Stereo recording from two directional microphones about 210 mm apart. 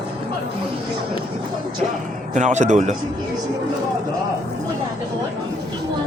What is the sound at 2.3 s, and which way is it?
Speech, 35° right (ahead or behind).